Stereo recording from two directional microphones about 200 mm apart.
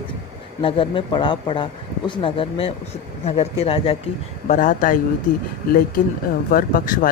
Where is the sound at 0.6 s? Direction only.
25° left (ahead or behind).